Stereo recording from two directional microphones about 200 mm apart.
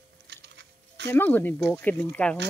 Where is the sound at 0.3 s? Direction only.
60° right (ahead or behind).